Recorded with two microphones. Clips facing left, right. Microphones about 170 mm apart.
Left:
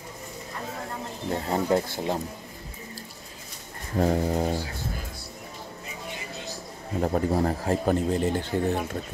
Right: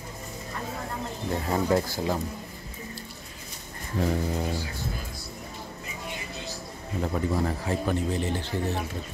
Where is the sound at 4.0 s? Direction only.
40° left (ahead or behind).